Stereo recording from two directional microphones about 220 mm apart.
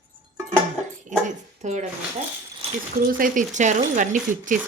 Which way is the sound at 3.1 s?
40° right (ahead or behind).